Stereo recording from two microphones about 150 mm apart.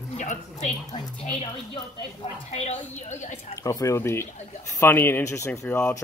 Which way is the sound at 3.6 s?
20° left (ahead or behind).